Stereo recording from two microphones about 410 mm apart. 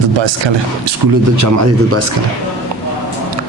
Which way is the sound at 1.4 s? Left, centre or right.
Right.